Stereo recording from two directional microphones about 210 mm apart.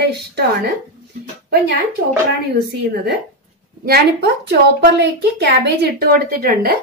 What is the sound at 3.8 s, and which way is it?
A woman's voice, 50° right (ahead or behind).